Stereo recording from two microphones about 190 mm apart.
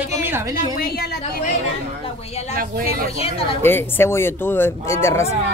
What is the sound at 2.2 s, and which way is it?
Speech, 35° left (ahead or behind).